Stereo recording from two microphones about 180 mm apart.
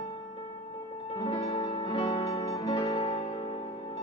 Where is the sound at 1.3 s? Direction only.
25° left (ahead or behind).